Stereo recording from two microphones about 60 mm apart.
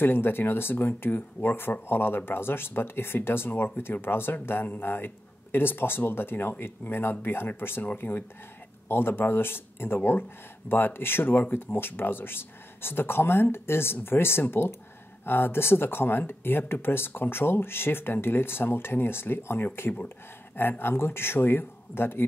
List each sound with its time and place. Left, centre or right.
0.0 s speech: left